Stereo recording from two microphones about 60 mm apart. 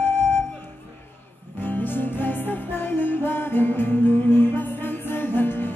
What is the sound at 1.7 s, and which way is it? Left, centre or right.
Music, left.